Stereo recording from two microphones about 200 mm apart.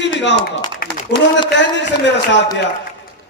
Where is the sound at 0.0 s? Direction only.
65° left (ahead or behind).